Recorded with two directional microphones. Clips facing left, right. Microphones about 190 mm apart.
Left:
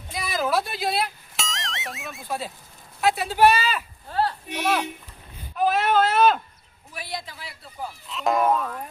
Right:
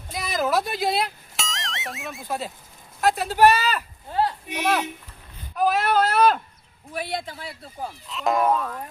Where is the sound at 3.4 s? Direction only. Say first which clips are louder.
Right 1 dB; 10° left (ahead or behind).